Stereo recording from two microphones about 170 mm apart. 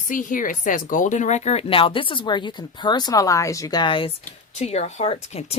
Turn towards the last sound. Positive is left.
turn(degrees=40)  # may be behind; listen again after turning